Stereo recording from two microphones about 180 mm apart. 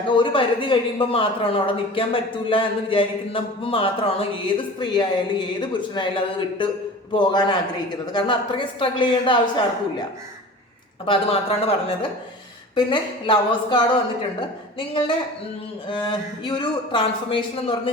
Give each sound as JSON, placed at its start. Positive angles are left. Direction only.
{"t": 0.1, "sound": "speech", "side_deg": 25}
{"t": 11.0, "sound": "speech", "side_deg": 30}